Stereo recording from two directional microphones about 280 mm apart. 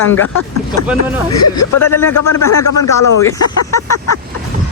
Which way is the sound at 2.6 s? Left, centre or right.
Left.